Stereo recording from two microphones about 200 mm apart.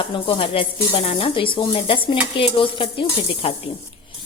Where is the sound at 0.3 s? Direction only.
25° left (ahead or behind).